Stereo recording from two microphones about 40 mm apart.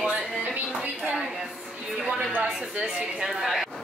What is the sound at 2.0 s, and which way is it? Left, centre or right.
Speech, right.